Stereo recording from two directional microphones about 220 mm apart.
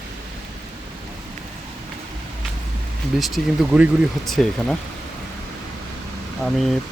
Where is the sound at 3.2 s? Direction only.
5° right (ahead or behind).